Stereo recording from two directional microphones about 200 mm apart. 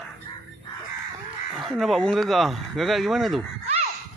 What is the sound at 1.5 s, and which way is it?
Speech, centre (ahead or behind).